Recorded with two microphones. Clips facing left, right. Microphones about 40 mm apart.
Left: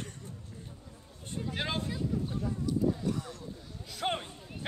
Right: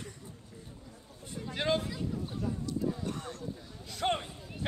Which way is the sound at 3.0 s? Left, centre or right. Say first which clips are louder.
Left 3 dB; right.